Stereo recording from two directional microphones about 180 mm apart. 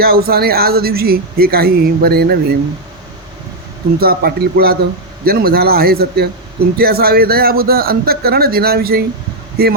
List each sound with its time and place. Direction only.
0.0 s speech: 60° right (ahead or behind)
4.0 s speech: 60° right (ahead or behind)